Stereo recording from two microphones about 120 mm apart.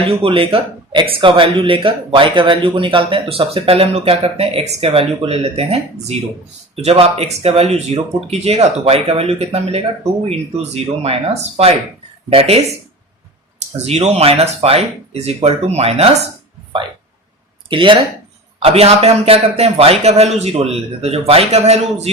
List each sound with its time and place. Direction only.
0.2 s a man's voice: 50° right (ahead or behind)
13.8 s a man's voice: 60° right (ahead or behind)
17.7 s speech: 45° right (ahead or behind)
18.6 s a man's voice: 55° right (ahead or behind)